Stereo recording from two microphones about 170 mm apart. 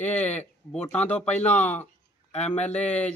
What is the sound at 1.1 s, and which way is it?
Speech, 40° left (ahead or behind).